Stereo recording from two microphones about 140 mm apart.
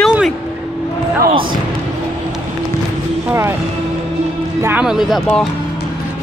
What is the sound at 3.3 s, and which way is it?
Speech, 20° right (ahead or behind).